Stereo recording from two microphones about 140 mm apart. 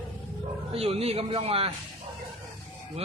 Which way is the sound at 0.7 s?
45° right (ahead or behind).